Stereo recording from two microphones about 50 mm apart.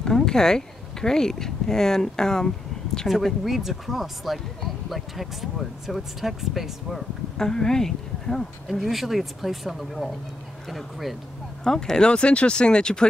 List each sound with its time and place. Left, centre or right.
0.0 s speech: centre
3.1 s speech: centre
7.3 s speech: centre
11.6 s speech: centre